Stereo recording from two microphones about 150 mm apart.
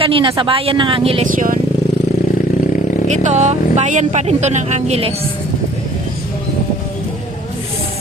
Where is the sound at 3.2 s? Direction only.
50° right (ahead or behind).